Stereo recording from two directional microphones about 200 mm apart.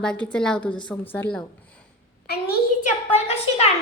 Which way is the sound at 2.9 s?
35° left (ahead or behind).